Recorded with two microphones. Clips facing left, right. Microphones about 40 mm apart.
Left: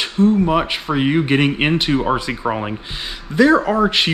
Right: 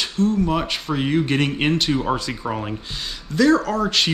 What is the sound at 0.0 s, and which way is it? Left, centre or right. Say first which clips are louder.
Speech: left 5 dB; left.